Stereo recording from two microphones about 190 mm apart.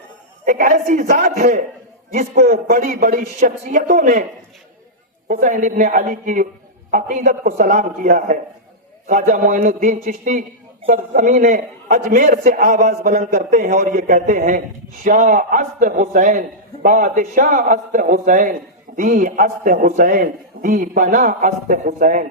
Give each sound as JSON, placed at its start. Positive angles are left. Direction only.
{"t": 0.4, "sound": "a man's voice", "side_deg": -45}
{"t": 2.4, "sound": "a man's voice", "side_deg": -50}
{"t": 5.3, "sound": "a man's voice", "side_deg": -45}